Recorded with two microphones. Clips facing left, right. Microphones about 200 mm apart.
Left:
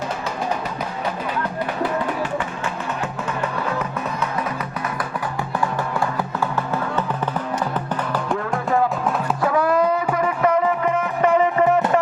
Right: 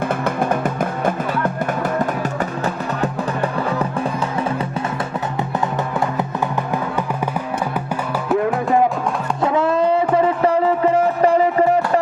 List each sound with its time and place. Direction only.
0.3 s music: 55° right (ahead or behind); by 3.8 s 35° right (ahead or behind)
9.4 s music: 25° right (ahead or behind)